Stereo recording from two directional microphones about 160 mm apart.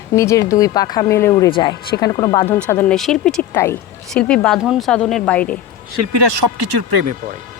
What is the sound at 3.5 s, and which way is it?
Speech, 15° left (ahead or behind).